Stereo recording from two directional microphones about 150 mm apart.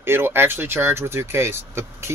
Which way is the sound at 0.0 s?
15° right (ahead or behind).